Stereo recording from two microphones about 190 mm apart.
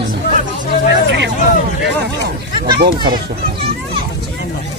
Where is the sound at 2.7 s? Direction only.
50° right (ahead or behind).